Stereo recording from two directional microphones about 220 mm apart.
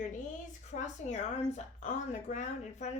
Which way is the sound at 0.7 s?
30° left (ahead or behind).